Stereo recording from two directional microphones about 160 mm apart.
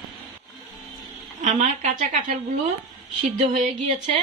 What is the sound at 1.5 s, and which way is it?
Speech, 50° right (ahead or behind).